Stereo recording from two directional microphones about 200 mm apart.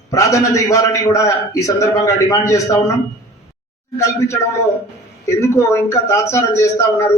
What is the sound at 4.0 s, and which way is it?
A man's voice, 15° left (ahead or behind).